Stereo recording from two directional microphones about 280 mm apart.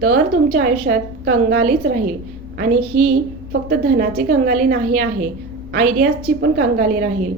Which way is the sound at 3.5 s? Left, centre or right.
Right.